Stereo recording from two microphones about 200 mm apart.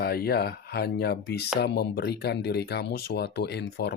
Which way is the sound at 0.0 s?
50° left (ahead or behind).